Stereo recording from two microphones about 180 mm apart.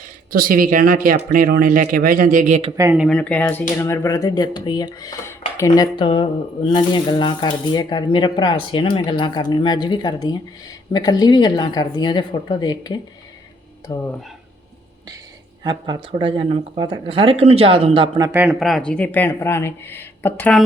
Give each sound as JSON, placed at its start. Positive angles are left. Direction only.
{"t": 0.3, "sound": "speech", "side_deg": -55}
{"t": 2.7, "sound": "speech", "side_deg": -15}
{"t": 3.1, "sound": "speech", "side_deg": 5}
{"t": 15.6, "sound": "speech", "side_deg": -25}
{"t": 18.3, "sound": "speech", "side_deg": -5}